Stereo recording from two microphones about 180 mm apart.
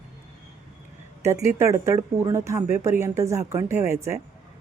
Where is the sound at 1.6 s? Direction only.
15° right (ahead or behind).